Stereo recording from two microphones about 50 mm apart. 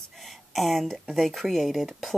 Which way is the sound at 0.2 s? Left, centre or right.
Centre.